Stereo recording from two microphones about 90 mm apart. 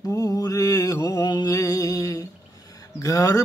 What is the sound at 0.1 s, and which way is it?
Mantra, 45° left (ahead or behind).